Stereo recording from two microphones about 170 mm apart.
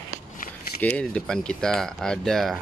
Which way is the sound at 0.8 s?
5° left (ahead or behind).